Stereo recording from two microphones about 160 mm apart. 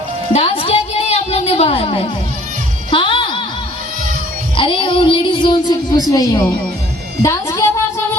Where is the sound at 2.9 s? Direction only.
30° left (ahead or behind).